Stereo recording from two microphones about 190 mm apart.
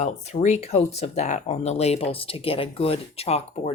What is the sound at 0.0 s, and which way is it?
Speech, 35° left (ahead or behind).